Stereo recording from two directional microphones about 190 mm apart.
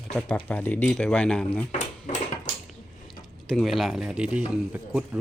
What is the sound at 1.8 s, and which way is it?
Dishes, 40° left (ahead or behind).